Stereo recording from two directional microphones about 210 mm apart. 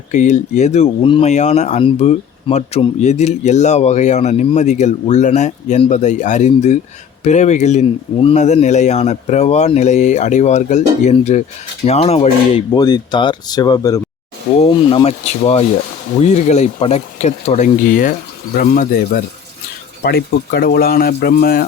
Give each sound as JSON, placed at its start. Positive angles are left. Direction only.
{"t": 0.1, "sound": "speech", "side_deg": 35}